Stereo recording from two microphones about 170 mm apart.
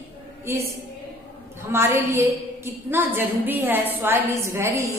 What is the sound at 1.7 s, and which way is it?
Speech, 15° right (ahead or behind).